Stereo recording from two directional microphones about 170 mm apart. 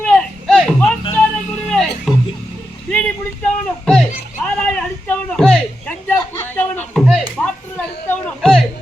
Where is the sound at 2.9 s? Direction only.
5° left (ahead or behind).